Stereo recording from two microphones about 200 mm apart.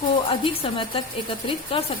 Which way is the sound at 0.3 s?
25° left (ahead or behind).